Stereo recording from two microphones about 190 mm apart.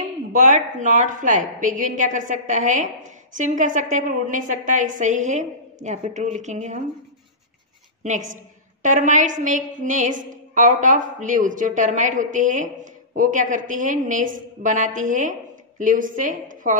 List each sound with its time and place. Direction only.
0.0 s speech: 40° right (ahead or behind)
8.0 s a woman's voice: 40° right (ahead or behind)